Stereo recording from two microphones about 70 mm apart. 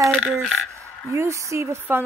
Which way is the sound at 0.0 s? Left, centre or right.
Centre.